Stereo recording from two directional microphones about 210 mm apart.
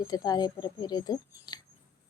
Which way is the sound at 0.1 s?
20° left (ahead or behind).